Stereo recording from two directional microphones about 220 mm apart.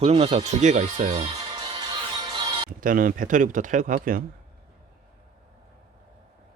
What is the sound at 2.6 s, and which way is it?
Speech, 40° right (ahead or behind).